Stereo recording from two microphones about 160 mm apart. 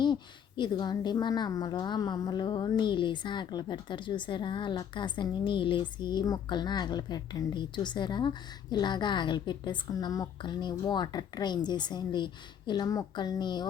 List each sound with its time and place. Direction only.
0.0 s a woman's voice: 30° left (ahead or behind)